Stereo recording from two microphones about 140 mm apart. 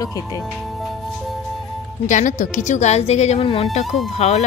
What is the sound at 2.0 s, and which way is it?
A woman's voice, 65° left (ahead or behind).